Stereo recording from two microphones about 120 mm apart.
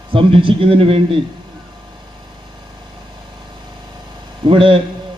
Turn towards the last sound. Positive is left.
turn(degrees=-45)  # may be behind; listen again after turning